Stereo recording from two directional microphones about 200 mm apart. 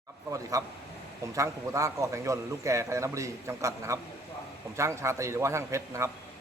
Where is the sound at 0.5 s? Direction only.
15° right (ahead or behind).